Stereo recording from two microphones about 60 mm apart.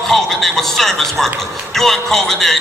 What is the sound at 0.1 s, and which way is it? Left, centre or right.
A man's voice, centre.